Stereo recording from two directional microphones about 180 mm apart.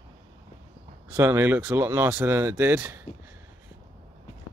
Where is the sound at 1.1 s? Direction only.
10° right (ahead or behind).